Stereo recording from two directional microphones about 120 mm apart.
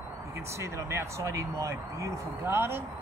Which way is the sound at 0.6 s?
25° right (ahead or behind).